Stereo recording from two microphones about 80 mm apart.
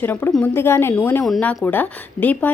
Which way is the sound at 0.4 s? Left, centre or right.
Left.